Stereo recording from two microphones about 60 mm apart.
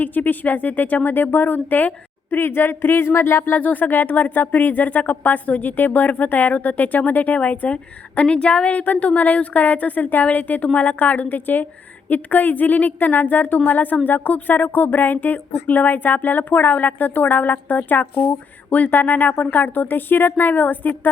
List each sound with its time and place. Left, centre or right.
0.0 s speech: left
3.6 s speech: left